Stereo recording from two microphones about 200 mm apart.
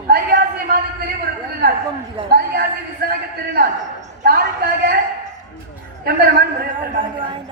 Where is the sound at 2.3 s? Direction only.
50° right (ahead or behind).